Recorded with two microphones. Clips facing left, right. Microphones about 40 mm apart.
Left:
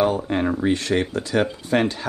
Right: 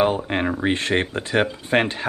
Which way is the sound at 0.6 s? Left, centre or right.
Right.